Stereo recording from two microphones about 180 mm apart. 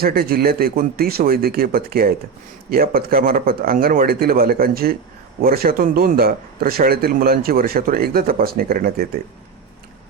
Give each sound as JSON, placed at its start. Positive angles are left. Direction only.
{"t": 0.0, "sound": "speech", "side_deg": -55}